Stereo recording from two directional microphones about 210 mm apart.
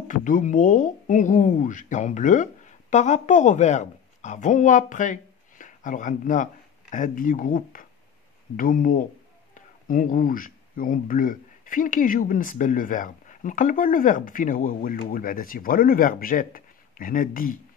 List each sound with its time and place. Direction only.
0.1 s speech: 35° left (ahead or behind)